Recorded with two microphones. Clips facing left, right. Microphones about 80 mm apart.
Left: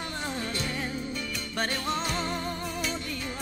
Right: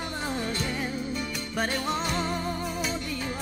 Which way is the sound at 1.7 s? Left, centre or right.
Centre.